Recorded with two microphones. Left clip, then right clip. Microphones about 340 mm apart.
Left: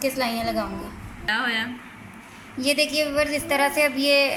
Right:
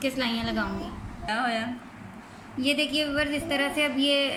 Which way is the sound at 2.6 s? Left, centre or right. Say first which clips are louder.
Left 4 dB; centre.